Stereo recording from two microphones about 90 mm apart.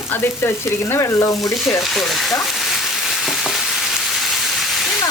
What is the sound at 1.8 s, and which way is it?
Speech, centre (ahead or behind).